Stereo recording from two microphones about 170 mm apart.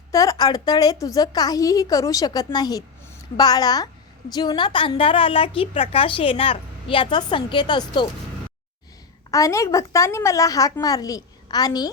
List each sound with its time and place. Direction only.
0.1 s a woman's voice: 20° left (ahead or behind)
9.3 s a woman's voice: 20° left (ahead or behind)